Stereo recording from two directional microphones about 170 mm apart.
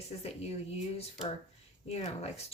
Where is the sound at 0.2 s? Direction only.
35° left (ahead or behind).